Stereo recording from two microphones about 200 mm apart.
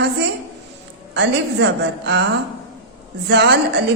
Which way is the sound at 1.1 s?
60° right (ahead or behind).